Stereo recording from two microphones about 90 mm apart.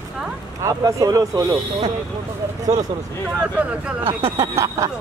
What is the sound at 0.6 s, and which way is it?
Speech, 35° right (ahead or behind).